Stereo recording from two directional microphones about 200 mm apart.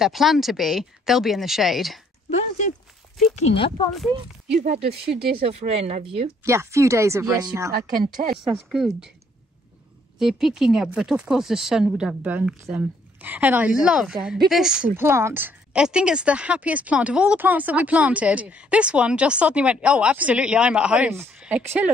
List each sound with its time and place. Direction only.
0.0 s speech: centre (ahead or behind)
2.3 s speech: 35° left (ahead or behind)
3.9 s speech: centre (ahead or behind)
5.4 s speech: 30° right (ahead or behind)
6.4 s speech: 15° right (ahead or behind)
7.7 s speech: 45° right (ahead or behind)
8.7 s speech: centre (ahead or behind)
10.1 s speech: centre (ahead or behind)